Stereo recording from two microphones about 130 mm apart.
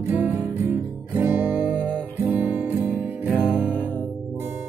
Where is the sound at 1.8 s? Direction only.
15° right (ahead or behind).